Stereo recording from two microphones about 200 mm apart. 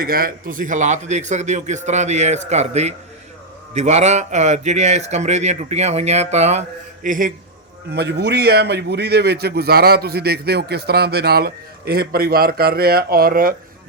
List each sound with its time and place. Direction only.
0.0 s speech: 45° right (ahead or behind)
7.9 s a man's voice: 55° right (ahead or behind)